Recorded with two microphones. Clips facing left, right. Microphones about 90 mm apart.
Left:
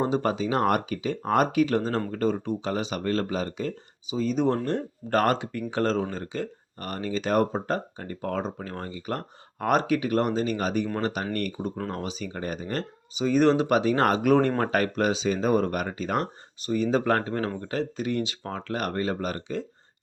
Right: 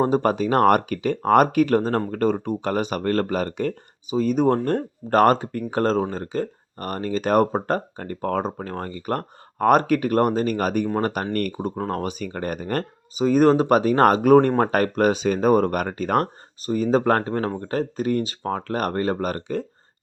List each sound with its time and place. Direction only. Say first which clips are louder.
0.0 s speech: right 5 dB; 45° right (ahead or behind)